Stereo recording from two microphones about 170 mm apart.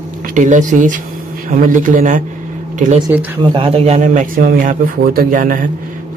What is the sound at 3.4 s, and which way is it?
A man's voice, 30° right (ahead or behind).